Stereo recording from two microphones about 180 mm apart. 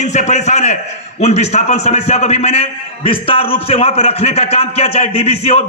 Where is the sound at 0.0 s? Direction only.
40° left (ahead or behind).